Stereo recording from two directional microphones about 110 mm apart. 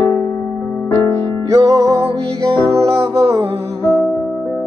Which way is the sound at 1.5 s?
30° right (ahead or behind).